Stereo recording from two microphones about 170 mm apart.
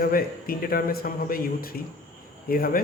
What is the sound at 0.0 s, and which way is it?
Speech, 60° left (ahead or behind).